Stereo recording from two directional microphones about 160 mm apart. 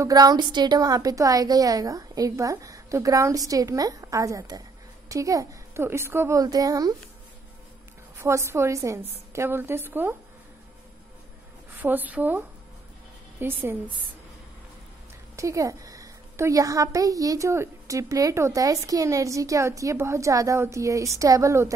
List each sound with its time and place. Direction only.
0.0 s a woman's voice: 25° right (ahead or behind)
8.2 s a woman's voice: 15° right (ahead or behind)
11.8 s a woman's voice: 10° right (ahead or behind)
15.3 s a woman's voice: 20° right (ahead or behind)